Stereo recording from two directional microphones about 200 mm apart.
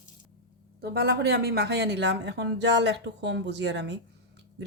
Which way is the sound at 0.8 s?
55° right (ahead or behind).